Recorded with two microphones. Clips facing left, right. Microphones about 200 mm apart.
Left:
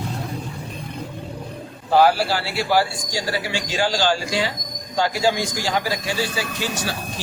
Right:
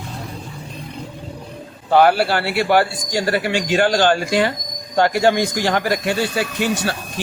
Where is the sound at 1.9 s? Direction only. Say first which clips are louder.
Right 3 dB; 60° right (ahead or behind).